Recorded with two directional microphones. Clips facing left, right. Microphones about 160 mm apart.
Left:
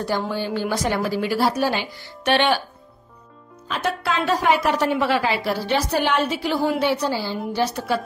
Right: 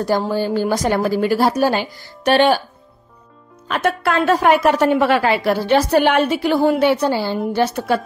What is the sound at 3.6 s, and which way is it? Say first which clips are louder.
A woman's voice: right 5 dB; 55° right (ahead or behind).